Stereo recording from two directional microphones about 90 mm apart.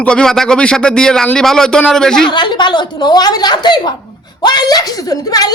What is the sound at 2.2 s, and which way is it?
A woman's voice, 60° left (ahead or behind).